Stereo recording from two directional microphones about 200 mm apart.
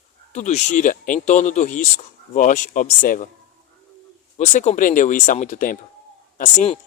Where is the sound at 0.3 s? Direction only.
35° left (ahead or behind).